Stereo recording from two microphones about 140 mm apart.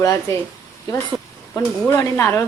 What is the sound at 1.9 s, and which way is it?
Speech, 15° left (ahead or behind).